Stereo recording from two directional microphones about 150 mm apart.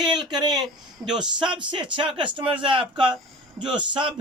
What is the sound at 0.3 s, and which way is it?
Speech, 30° right (ahead or behind).